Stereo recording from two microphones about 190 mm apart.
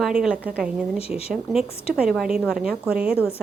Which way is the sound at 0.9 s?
30° left (ahead or behind).